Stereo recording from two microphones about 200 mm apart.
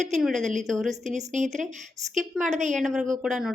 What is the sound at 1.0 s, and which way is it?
Speech, 35° right (ahead or behind).